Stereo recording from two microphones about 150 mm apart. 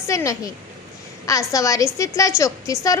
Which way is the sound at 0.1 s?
20° left (ahead or behind).